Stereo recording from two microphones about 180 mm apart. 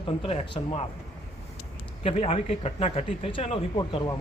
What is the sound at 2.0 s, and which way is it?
A man's voice, 30° left (ahead or behind).